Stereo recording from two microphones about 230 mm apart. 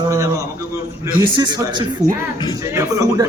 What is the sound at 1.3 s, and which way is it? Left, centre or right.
Speech, centre.